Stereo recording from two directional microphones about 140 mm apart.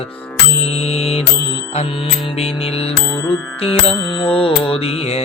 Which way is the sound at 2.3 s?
45° left (ahead or behind).